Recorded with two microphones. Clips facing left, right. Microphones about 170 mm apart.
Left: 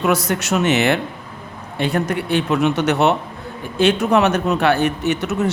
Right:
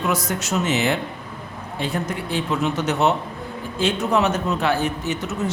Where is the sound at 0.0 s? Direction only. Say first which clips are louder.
Left 5 dB; 70° left (ahead or behind).